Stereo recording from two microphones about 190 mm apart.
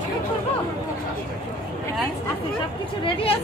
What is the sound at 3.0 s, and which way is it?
Speech, 30° left (ahead or behind).